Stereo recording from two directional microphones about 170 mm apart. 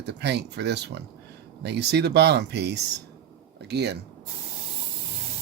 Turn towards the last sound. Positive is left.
turn(degrees=-80)